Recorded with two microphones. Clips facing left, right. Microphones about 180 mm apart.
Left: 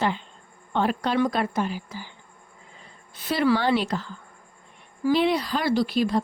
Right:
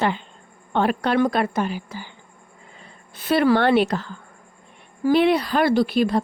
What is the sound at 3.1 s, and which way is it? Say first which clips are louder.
A woman's voice: right 4 dB; 60° right (ahead or behind).